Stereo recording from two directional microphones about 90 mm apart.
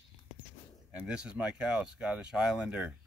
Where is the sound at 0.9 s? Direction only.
10° right (ahead or behind).